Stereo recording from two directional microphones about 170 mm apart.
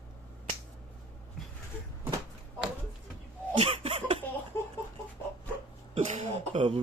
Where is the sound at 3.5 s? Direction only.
35° right (ahead or behind).